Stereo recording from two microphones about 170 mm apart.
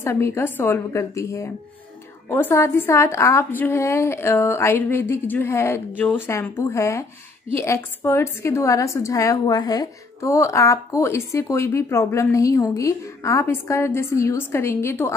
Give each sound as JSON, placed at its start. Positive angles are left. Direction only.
{"t": 0.0, "sound": "a woman's voice", "side_deg": 15}